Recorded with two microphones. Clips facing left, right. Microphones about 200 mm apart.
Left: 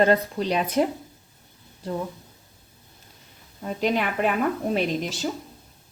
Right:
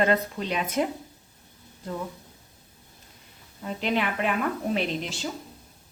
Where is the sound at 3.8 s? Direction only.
45° left (ahead or behind).